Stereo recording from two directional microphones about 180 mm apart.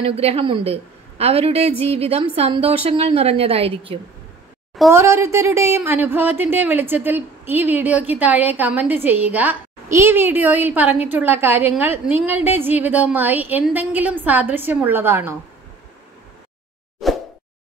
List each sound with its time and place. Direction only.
0.0 s a woman's voice: 35° right (ahead or behind)
4.9 s speech: 15° right (ahead or behind)
17.0 s plop: centre (ahead or behind)